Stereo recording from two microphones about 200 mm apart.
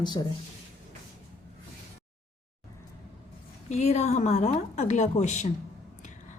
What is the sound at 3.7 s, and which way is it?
A woman's voice, 35° left (ahead or behind).